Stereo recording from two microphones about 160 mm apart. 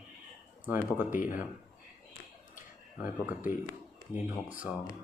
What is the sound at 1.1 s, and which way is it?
Speech, 55° left (ahead or behind).